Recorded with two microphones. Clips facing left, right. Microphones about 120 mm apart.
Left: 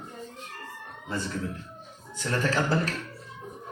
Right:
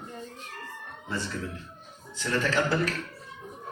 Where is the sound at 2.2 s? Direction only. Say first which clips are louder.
Right 1 dB; 35° left (ahead or behind).